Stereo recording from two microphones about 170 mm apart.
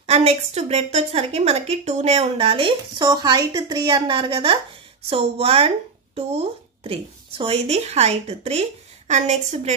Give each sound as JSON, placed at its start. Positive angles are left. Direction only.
{"t": 0.0, "sound": "a woman's voice", "side_deg": -35}